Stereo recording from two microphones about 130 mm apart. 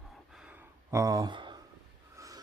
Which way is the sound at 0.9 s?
25° right (ahead or behind).